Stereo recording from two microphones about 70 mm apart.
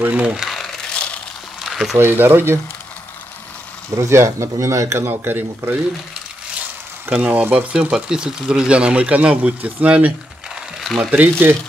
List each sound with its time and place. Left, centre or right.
0.0 s speech: centre
0.4 s crumpling: centre
1.6 s a sound: centre
2.0 s speech: right
3.9 s speech: right
5.0 s speech: right
7.2 s speech: right
10.8 s a sound: centre
11.1 s speech: right